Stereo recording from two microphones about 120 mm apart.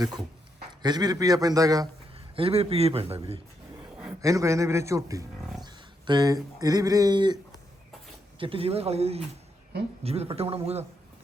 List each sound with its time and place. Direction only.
0.0 s a man's voice: 35° right (ahead or behind)
2.1 s a man's voice: 55° right (ahead or behind)
4.2 s a man's voice: 25° right (ahead or behind)
8.4 s speech: 50° right (ahead or behind)